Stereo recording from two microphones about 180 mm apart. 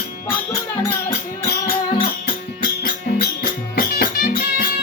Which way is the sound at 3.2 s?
60° left (ahead or behind).